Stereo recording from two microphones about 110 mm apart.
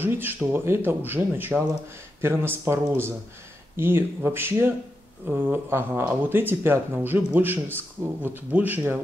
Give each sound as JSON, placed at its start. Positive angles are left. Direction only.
{"t": 0.0, "sound": "speech", "side_deg": -20}